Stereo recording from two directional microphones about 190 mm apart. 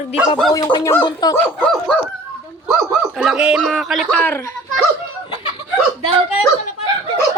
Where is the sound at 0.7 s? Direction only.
15° left (ahead or behind).